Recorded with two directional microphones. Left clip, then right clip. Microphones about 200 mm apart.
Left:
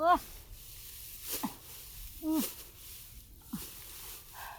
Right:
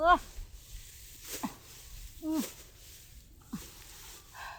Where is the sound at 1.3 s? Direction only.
35° left (ahead or behind).